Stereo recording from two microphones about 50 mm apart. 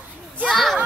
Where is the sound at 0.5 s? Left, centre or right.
Centre.